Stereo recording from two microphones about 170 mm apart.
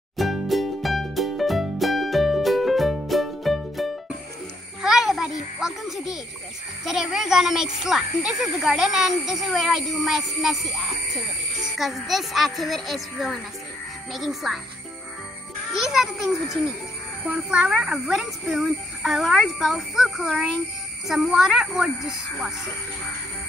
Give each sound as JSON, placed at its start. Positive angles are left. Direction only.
{"t": 0.2, "sound": "music", "side_deg": 0}
{"t": 4.8, "sound": "a sound", "side_deg": 0}
{"t": 6.9, "sound": "a child's voice", "side_deg": 0}
{"t": 15.7, "sound": "a child's voice", "side_deg": 0}